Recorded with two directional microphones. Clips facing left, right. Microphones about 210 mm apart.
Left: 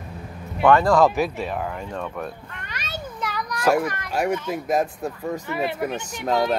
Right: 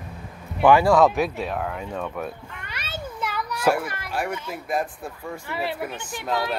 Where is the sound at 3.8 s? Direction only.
5° right (ahead or behind).